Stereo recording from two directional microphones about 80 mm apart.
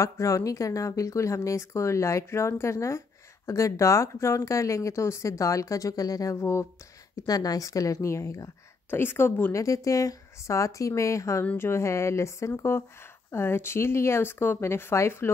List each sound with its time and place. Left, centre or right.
0.0 s speech: left
7.2 s speech: left
8.9 s speech: left
9.6 s speech: left